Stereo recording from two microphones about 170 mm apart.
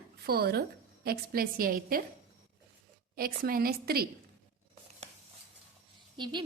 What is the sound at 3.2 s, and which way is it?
Speech, 60° right (ahead or behind).